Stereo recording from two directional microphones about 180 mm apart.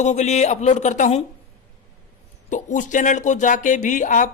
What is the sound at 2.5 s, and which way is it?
Speech, 45° left (ahead or behind).